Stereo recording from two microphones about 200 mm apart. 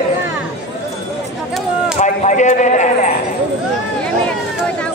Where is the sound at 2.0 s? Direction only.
40° left (ahead or behind).